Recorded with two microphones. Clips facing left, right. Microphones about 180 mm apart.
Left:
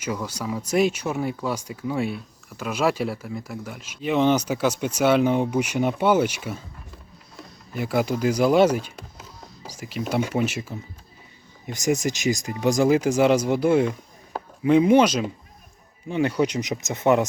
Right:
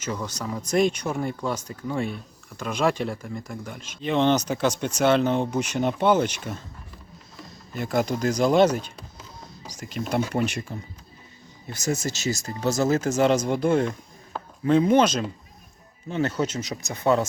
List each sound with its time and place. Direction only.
0.0 s speech: 10° left (ahead or behind)
7.7 s speech: 10° left (ahead or behind)
11.6 s speech: 15° left (ahead or behind)